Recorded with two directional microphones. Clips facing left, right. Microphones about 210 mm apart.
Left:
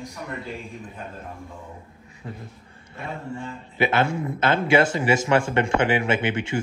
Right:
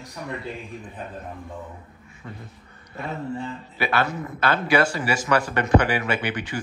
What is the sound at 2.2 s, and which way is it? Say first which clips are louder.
Speech: left 3 dB; 30° left (ahead or behind).